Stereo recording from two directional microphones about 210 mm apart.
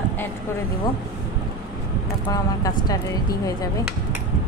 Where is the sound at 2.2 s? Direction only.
15° left (ahead or behind).